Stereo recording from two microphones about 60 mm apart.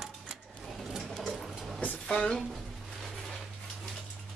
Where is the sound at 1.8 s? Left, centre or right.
Left.